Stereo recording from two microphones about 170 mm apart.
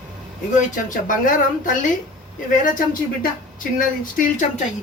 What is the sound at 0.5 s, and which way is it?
Speech, 50° left (ahead or behind).